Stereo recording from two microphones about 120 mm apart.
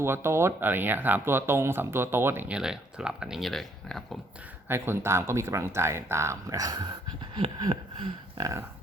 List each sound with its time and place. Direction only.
0.0 s speech: 20° right (ahead or behind)
2.6 s speech: 5° right (ahead or behind)
4.7 s speech: 20° right (ahead or behind); by 6.9 s 35° right (ahead or behind)
8.4 s speech: 30° right (ahead or behind)